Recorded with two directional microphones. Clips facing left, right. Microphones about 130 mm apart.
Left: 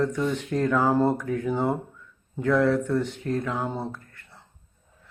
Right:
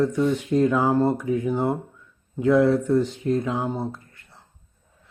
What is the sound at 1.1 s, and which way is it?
Speech, 10° right (ahead or behind).